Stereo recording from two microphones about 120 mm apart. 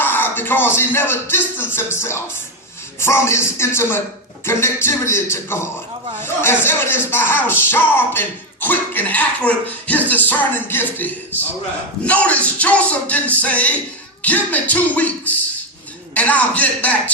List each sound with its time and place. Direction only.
0.0 s music: 15° left (ahead or behind)
6.2 s speech: 20° left (ahead or behind)